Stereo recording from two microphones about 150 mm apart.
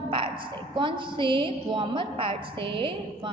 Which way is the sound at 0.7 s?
35° right (ahead or behind).